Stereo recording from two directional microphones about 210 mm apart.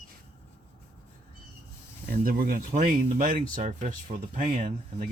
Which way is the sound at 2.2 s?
45° right (ahead or behind).